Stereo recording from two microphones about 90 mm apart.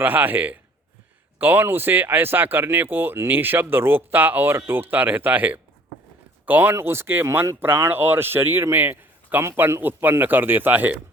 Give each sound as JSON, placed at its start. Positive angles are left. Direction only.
{"t": 0.0, "sound": "speech", "side_deg": -20}